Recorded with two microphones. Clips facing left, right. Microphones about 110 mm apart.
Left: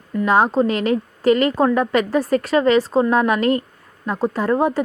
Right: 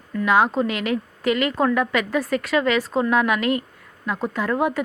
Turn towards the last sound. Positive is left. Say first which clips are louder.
# left 4 dB
turn(degrees=35)  # may be behind; listen again after turning